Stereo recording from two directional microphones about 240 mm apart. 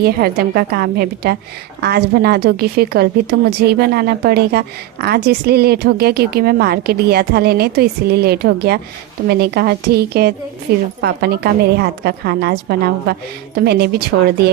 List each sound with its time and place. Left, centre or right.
0.0 s a woman's voice: right